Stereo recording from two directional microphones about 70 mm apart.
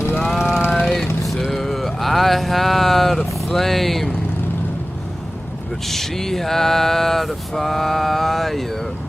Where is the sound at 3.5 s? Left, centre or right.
Centre.